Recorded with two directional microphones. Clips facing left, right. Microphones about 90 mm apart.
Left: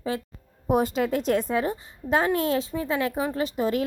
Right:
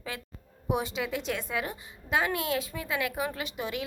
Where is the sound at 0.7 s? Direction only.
45° left (ahead or behind).